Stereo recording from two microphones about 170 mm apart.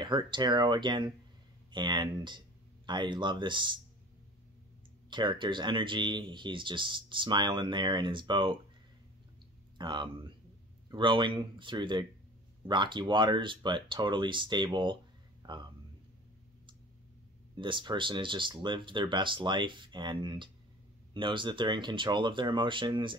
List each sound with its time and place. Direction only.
0.0 s speech: 25° right (ahead or behind)
5.1 s speech: 25° right (ahead or behind)
9.8 s a man's voice: 25° right (ahead or behind)
17.6 s speech: 30° right (ahead or behind)